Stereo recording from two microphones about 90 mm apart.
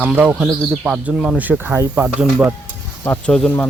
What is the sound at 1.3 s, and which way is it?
Speech, 20° right (ahead or behind).